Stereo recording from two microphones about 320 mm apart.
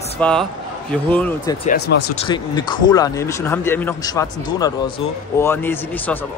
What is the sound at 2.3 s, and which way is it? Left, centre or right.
Speech, centre.